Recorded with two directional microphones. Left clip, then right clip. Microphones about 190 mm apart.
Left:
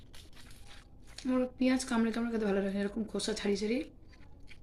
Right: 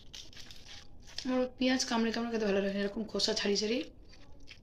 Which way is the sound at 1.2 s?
15° left (ahead or behind).